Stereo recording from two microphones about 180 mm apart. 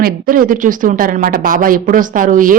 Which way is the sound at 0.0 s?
50° right (ahead or behind).